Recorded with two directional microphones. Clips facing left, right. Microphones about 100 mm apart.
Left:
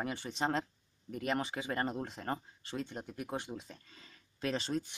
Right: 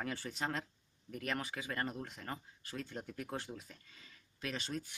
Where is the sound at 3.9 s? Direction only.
35° left (ahead or behind).